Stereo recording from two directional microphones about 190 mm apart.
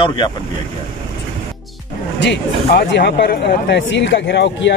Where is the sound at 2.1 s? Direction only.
70° left (ahead or behind).